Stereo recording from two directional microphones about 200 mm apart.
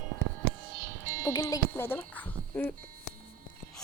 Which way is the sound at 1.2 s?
15° left (ahead or behind).